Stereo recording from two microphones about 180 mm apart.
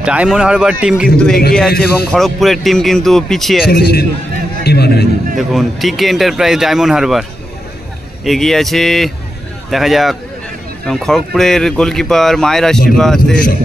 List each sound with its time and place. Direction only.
0.0 s speech: 5° right (ahead or behind)
3.6 s a man's voice: 60° left (ahead or behind)
5.4 s speech: centre (ahead or behind)